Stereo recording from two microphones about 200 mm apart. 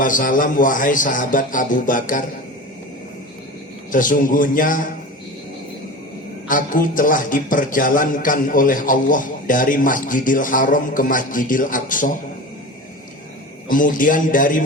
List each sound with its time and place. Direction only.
0.0 s a man's voice: 40° left (ahead or behind)
3.9 s a man's voice: 40° left (ahead or behind)
6.5 s a man's voice: 45° left (ahead or behind)
13.7 s a man's voice: 40° left (ahead or behind)